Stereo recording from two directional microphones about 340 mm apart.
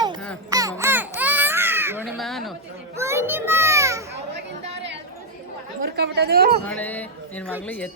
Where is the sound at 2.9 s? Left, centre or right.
Centre.